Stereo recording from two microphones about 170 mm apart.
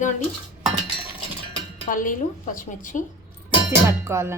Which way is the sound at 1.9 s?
50° left (ahead or behind).